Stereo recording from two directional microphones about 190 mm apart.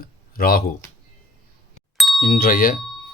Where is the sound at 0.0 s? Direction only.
50° left (ahead or behind).